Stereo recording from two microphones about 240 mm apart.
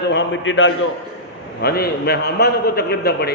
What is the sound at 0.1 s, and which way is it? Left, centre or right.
Speech, left.